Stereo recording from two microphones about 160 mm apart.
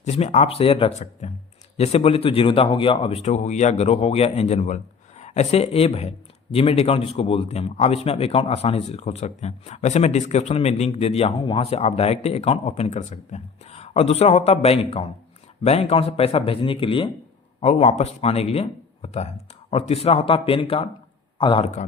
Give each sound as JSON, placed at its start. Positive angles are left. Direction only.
{"t": 0.0, "sound": "speech", "side_deg": 45}